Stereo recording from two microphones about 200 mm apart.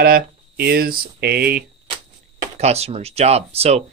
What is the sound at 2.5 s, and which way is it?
Speech, 30° right (ahead or behind).